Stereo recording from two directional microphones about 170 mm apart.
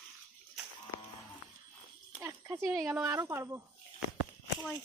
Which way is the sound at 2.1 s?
15° right (ahead or behind).